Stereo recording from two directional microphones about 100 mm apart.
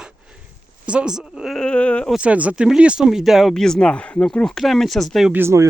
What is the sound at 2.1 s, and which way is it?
Speech, 10° right (ahead or behind).